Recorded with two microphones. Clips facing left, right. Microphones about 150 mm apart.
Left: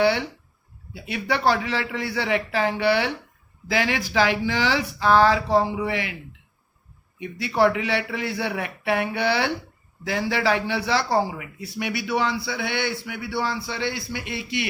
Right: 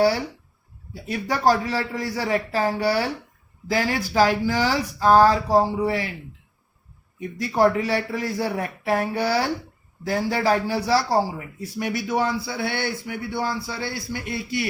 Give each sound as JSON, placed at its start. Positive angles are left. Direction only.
{"t": 0.9, "sound": "speech", "side_deg": -40}
{"t": 7.2, "sound": "a man's voice", "side_deg": -45}